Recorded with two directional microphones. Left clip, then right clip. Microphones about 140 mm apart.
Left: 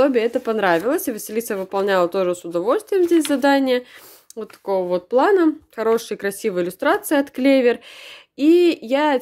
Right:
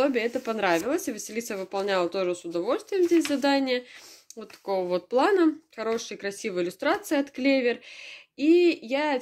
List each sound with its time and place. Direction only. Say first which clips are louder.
0.0 s speech: left 8 dB; 40° left (ahead or behind)
4.4 s speech: left 7 dB; 30° left (ahead or behind)
5.8 s speech: left 10 dB; 50° left (ahead or behind)